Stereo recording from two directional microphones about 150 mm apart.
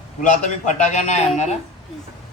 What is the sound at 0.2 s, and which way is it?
A man's voice, 55° left (ahead or behind).